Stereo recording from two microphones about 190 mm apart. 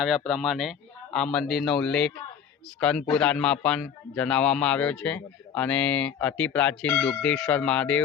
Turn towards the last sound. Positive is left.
turn(degrees=5)  # may be behind; listen again after turning